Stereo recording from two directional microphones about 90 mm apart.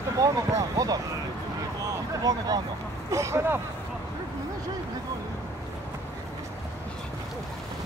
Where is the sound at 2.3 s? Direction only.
45° right (ahead or behind).